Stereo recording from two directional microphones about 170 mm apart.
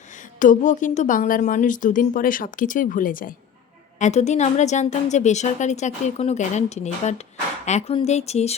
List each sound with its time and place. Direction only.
0.3 s a woman's voice: 50° left (ahead or behind)
4.0 s a woman's voice: 40° left (ahead or behind)